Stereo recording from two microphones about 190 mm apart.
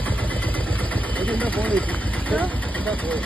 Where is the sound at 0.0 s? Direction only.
10° left (ahead or behind).